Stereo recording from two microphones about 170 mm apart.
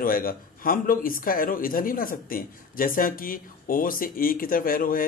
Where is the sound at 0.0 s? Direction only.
55° left (ahead or behind).